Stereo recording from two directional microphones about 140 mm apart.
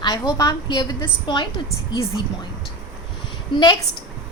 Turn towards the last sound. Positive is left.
turn(degrees=30)  # may be behind; listen again after turning